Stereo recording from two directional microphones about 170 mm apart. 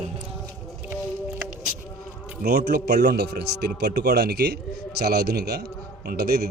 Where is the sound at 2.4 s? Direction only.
65° right (ahead or behind).